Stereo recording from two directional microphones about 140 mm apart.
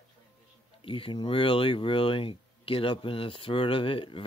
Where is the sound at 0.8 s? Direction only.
40° left (ahead or behind).